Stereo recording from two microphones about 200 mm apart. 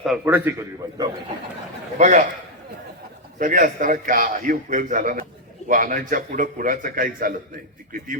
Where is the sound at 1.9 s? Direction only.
35° right (ahead or behind).